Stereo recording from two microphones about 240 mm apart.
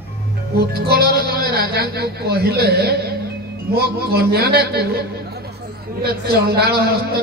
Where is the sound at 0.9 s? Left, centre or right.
Right.